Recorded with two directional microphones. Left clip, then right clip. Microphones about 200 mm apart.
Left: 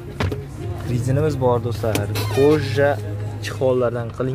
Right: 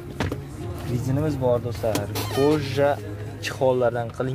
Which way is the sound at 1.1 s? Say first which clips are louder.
Left 4 dB; 20° left (ahead or behind).